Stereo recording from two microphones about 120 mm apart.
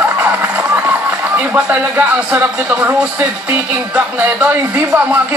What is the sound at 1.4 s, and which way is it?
Speech, 15° right (ahead or behind).